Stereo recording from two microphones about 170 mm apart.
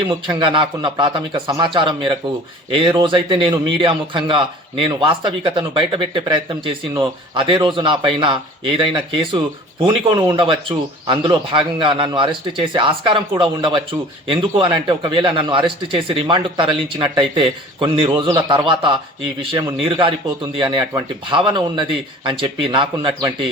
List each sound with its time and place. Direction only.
0.1 s a man's voice: 25° right (ahead or behind)